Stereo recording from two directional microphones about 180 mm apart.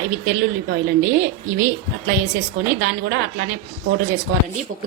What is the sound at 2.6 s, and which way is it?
Speech, 45° right (ahead or behind).